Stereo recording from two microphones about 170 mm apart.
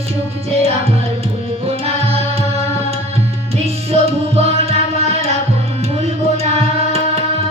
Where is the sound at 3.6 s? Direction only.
35° right (ahead or behind).